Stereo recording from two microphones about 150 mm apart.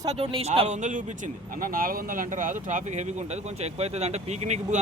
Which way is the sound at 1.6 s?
70° right (ahead or behind).